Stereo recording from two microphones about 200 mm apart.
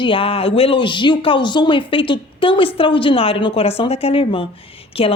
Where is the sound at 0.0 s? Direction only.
25° left (ahead or behind).